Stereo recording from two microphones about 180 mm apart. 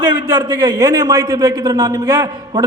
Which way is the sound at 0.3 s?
15° right (ahead or behind).